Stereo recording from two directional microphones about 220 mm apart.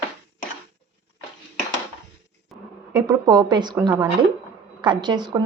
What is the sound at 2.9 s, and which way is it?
A woman's voice, 15° right (ahead or behind).